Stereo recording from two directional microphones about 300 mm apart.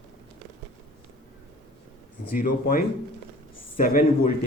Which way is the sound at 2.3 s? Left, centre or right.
Left.